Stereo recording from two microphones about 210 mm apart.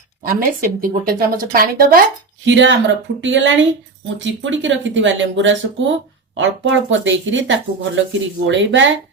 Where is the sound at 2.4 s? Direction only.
60° right (ahead or behind).